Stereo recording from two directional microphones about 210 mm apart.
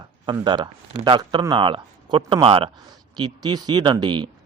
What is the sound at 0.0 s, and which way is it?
Speech, 20° right (ahead or behind).